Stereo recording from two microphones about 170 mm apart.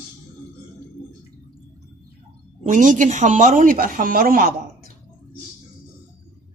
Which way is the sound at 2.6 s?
50° right (ahead or behind).